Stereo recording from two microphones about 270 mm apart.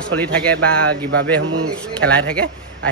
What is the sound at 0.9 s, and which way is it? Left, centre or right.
Speech, right.